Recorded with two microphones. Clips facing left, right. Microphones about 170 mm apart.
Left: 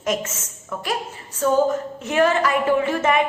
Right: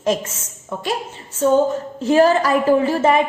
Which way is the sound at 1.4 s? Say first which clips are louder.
Right 3 dB; 30° right (ahead or behind).